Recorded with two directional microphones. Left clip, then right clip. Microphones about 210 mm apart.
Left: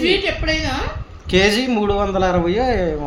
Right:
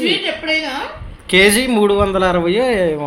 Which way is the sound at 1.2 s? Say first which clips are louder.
Right 4 dB; 10° right (ahead or behind).